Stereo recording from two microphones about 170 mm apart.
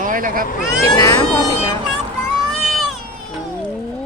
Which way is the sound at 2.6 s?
Centre (ahead or behind).